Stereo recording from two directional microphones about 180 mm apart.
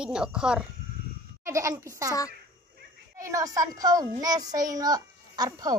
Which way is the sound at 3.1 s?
15° right (ahead or behind).